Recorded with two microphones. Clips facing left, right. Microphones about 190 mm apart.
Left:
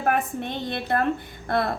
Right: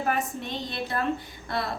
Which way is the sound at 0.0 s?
55° left (ahead or behind).